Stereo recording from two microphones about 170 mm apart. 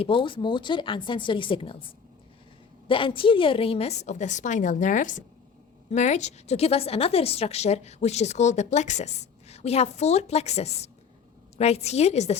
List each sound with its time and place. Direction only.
0.0 s a woman's voice: 30° left (ahead or behind)
2.8 s a woman's voice: 30° left (ahead or behind)